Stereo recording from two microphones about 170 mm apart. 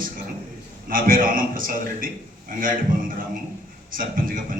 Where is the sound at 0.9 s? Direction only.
55° right (ahead or behind).